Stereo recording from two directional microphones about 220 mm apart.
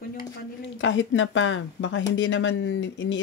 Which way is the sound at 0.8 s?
60° left (ahead or behind).